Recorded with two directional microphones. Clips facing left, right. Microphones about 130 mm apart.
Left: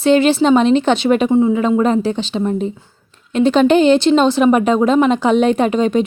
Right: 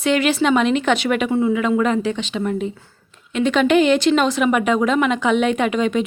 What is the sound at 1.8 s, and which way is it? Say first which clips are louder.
A woman's voice: left 4 dB; 35° left (ahead or behind).